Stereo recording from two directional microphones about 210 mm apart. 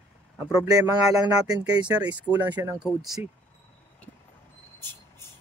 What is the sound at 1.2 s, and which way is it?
Speech, 15° right (ahead or behind).